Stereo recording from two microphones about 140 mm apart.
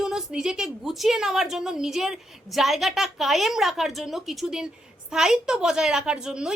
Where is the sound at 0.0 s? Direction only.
5° right (ahead or behind).